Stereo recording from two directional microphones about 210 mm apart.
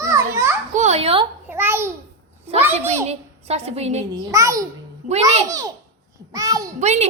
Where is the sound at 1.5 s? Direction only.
10° right (ahead or behind).